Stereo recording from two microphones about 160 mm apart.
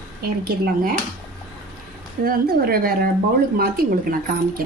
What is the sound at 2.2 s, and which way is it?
A woman's voice, 70° right (ahead or behind).